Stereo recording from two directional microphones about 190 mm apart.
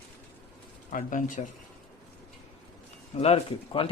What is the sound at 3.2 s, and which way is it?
Speech, 30° left (ahead or behind).